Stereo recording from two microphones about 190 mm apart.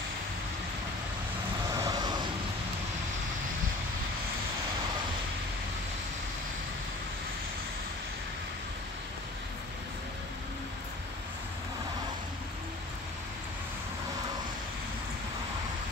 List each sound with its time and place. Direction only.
1.7 s vehicle: 20° right (ahead or behind)